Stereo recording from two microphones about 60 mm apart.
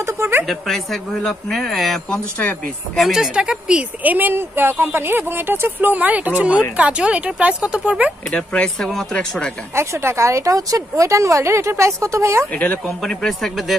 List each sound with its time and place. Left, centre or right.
0.0 s speech: right
0.5 s a woman's voice: centre
4.0 s speech: right
8.3 s speech: left
9.8 s a woman's voice: right
12.8 s speech: centre